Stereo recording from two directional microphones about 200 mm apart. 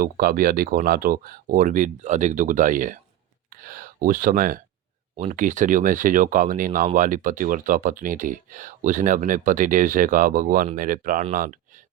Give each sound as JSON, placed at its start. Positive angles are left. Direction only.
{"t": 0.0, "sound": "speech", "side_deg": -45}